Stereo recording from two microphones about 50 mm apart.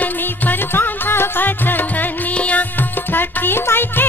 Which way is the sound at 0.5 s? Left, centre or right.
Left.